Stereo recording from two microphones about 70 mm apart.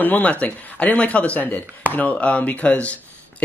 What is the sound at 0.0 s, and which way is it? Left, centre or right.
Speech, left.